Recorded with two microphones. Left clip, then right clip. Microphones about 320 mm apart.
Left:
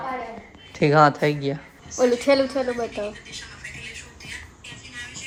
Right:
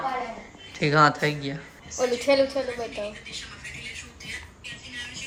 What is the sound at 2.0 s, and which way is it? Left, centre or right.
Speech, left.